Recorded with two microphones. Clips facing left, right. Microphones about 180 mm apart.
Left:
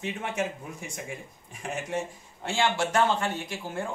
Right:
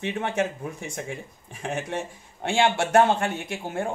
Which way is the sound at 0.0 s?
65° right (ahead or behind).